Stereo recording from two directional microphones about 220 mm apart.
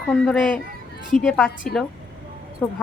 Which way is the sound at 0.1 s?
5° left (ahead or behind).